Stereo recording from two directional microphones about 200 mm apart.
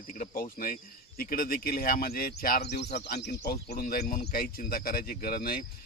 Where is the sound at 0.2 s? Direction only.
45° left (ahead or behind).